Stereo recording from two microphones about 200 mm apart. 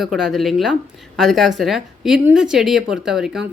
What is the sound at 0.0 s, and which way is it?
A woman's voice, centre (ahead or behind).